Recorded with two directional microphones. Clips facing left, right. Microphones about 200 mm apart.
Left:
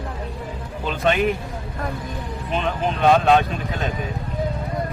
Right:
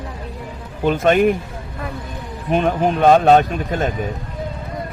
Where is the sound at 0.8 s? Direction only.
50° right (ahead or behind).